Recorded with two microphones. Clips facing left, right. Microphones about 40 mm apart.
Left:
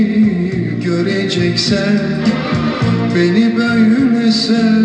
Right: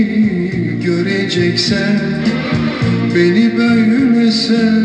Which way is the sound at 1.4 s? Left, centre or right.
Centre.